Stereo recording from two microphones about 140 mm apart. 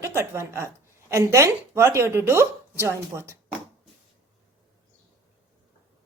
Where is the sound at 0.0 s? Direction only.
20° right (ahead or behind).